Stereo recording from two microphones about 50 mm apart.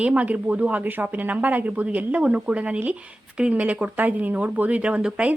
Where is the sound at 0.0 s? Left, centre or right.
Right.